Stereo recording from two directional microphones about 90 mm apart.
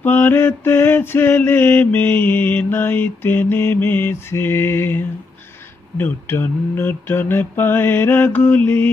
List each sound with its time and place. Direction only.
0.0 s mantra: 20° left (ahead or behind)